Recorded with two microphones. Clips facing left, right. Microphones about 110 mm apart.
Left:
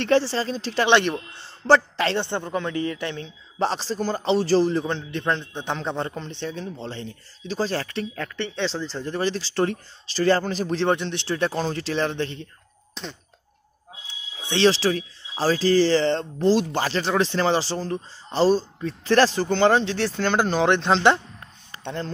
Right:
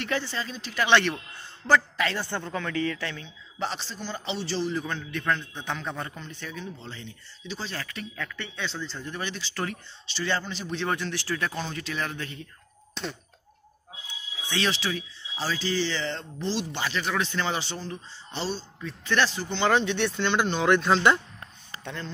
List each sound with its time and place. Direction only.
0.0 s speech: 35° left (ahead or behind)
0.8 s a woman's voice: 20° left (ahead or behind)
3.2 s speech: 35° left (ahead or behind)
4.8 s speech: 25° left (ahead or behind)
11.0 s a woman's voice: 25° left (ahead or behind)
13.0 s a sound: centre (ahead or behind)
14.4 s a woman's voice: 30° left (ahead or behind)